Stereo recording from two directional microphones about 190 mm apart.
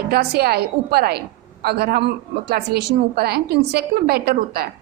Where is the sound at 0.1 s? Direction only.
60° right (ahead or behind).